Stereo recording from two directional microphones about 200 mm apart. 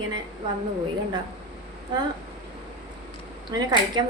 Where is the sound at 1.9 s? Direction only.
20° right (ahead or behind).